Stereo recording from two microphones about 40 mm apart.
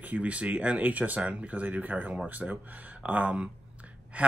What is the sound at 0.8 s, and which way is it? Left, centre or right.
Speech, right.